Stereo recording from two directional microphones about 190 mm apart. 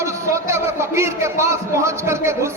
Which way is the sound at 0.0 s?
15° right (ahead or behind).